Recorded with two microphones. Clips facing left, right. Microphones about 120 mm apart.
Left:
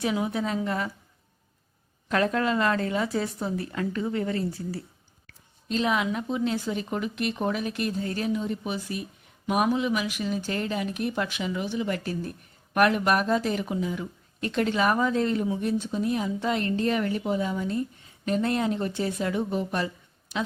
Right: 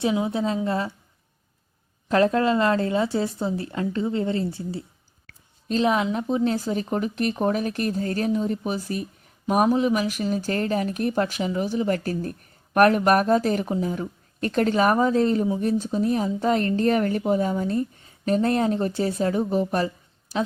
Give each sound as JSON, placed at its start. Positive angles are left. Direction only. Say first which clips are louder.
{"t": 0.0, "sound": "speech", "louder": "right 4 dB", "side_deg": -25}
{"t": 2.0, "sound": "speech", "louder": "right 5 dB", "side_deg": -30}
{"t": 5.8, "sound": "speech", "louder": "right 4 dB", "side_deg": -30}